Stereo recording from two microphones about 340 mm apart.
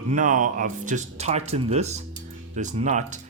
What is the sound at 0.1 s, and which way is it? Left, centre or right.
Speech, right.